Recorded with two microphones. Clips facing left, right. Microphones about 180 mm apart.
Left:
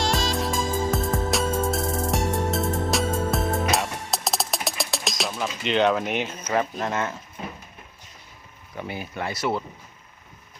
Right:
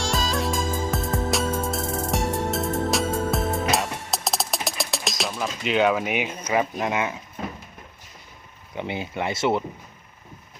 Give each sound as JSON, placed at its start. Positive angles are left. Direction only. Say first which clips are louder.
{"t": 0.3, "sound": "music", "louder": "even", "side_deg": 0}
{"t": 6.5, "sound": "speech", "louder": "right 1 dB", "side_deg": -10}
{"t": 8.7, "sound": "speech", "louder": "right 3 dB", "side_deg": -20}